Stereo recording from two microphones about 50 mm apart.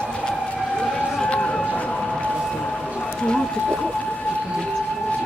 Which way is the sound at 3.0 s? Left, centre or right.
Centre.